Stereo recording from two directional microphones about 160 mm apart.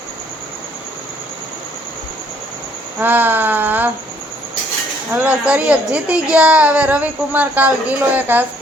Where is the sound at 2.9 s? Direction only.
10° right (ahead or behind).